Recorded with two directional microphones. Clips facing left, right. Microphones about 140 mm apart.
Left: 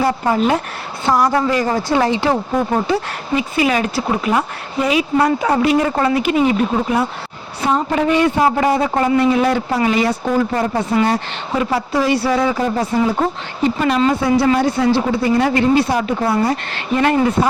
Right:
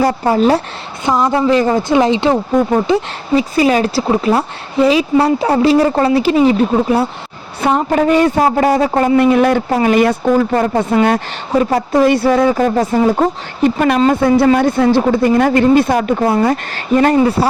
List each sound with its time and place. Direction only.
0.0 s speech: 35° right (ahead or behind)
1.0 s a woman's voice: 20° right (ahead or behind)
3.3 s speech: 35° right (ahead or behind)
7.6 s speech: 60° right (ahead or behind)
7.9 s speech: 40° right (ahead or behind)
9.2 s speech: 60° right (ahead or behind)
13.7 s speech: 55° right (ahead or behind); by 17.5 s 35° right (ahead or behind)